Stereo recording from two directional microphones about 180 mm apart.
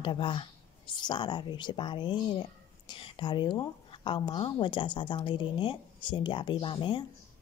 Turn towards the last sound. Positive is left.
turn(degrees=25)  # may be behind; listen again after turning